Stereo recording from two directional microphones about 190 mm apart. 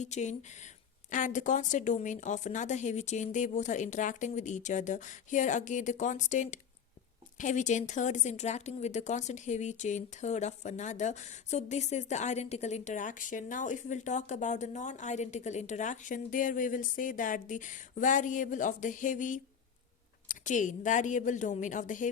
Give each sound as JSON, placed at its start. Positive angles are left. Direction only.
{"t": 0.0, "sound": "a woman's voice", "side_deg": 40}